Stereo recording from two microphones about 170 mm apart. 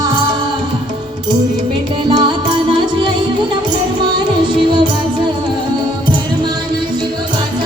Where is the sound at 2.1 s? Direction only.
25° right (ahead or behind).